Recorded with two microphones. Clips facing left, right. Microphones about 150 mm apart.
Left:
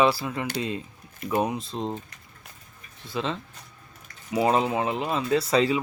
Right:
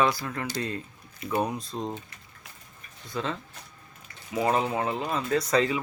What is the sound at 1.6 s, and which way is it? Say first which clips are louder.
Speech: left 2 dB; 25° left (ahead or behind).